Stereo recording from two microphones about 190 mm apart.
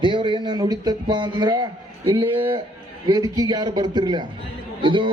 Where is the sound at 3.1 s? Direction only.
20° right (ahead or behind).